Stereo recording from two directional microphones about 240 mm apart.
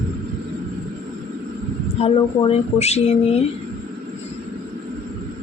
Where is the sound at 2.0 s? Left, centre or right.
Left.